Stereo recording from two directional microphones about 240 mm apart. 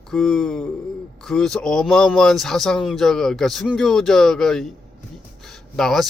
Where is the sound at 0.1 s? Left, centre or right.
Centre.